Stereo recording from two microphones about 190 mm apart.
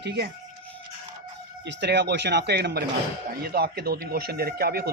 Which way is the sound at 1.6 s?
65° right (ahead or behind).